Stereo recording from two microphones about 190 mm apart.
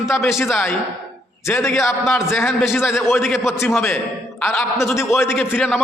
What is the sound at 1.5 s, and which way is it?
Speech, 15° left (ahead or behind).